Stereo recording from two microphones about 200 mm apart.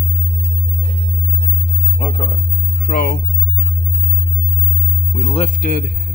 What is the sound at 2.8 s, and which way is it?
Music, 45° left (ahead or behind).